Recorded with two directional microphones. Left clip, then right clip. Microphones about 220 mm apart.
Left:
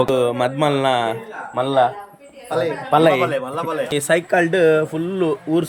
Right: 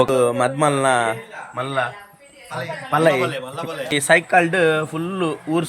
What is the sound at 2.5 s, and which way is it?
Speech, 30° left (ahead or behind).